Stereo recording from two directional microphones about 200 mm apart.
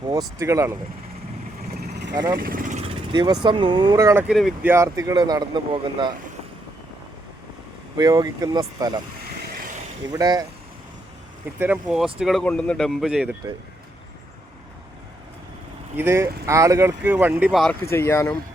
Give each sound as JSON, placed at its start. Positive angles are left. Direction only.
{"t": 0.1, "sound": "speech", "side_deg": -15}
{"t": 1.8, "sound": "vehicle", "side_deg": -55}
{"t": 2.1, "sound": "speech", "side_deg": -15}
{"t": 2.4, "sound": "vehicle", "side_deg": -45}
{"t": 2.8, "sound": "vehicle", "side_deg": -25}
{"t": 3.4, "sound": "speech", "side_deg": -25}
{"t": 4.4, "sound": "speech", "side_deg": 0}
{"t": 4.7, "sound": "speech", "side_deg": -15}
{"t": 7.9, "sound": "speech", "side_deg": -20}
{"t": 10.1, "sound": "speech", "side_deg": -20}
{"t": 11.6, "sound": "speech", "side_deg": -5}
{"t": 16.0, "sound": "speech", "side_deg": -15}
{"t": 17.8, "sound": "speech", "side_deg": 15}